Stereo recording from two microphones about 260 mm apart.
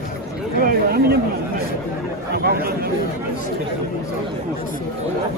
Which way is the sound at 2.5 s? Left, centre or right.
Right.